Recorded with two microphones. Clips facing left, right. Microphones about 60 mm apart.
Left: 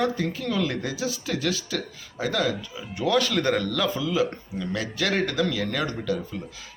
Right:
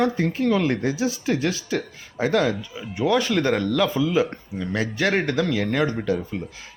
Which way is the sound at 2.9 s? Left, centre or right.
Centre.